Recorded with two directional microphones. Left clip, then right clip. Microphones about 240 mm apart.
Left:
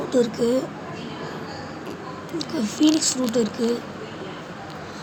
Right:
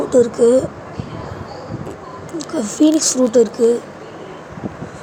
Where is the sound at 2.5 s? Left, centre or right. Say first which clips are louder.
Right 6 dB; centre.